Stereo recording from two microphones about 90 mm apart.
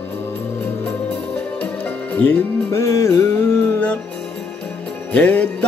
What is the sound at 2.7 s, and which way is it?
Music, 35° left (ahead or behind).